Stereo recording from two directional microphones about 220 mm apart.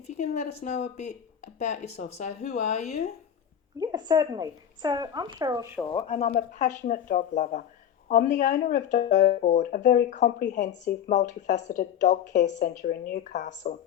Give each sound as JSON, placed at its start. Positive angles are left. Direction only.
{"t": 0.1, "sound": "speech", "side_deg": 30}
{"t": 3.8, "sound": "speech", "side_deg": -15}
{"t": 5.8, "sound": "speech", "side_deg": 15}